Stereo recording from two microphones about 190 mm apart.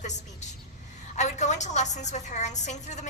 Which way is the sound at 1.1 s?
40° left (ahead or behind).